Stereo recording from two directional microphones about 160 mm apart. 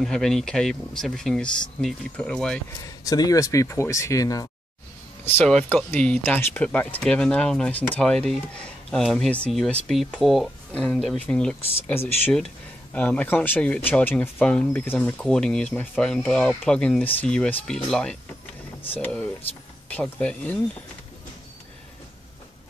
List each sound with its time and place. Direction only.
0.0 s speech: centre (ahead or behind)
3.0 s speech: 20° left (ahead or behind)
5.2 s speech: 5° left (ahead or behind)